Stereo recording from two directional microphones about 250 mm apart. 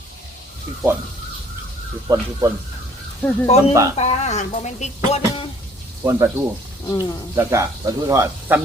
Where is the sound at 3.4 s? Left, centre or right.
Left.